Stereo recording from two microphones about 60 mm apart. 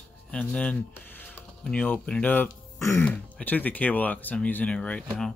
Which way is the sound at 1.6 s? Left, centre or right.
Centre.